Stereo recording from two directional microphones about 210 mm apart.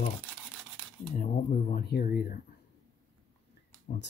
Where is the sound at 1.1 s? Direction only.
35° left (ahead or behind).